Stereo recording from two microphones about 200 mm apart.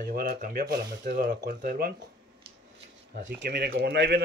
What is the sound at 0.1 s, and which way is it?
A man's voice, 45° right (ahead or behind).